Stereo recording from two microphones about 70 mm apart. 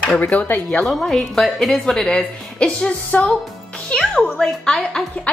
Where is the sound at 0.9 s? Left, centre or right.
Centre.